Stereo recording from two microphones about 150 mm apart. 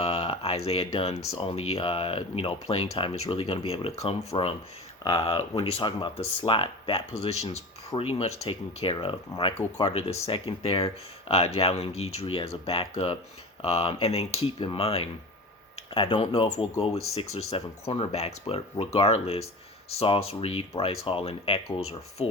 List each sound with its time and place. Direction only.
0.0 s speech: 45° left (ahead or behind)